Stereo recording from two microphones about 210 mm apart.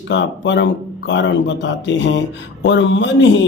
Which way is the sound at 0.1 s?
60° left (ahead or behind).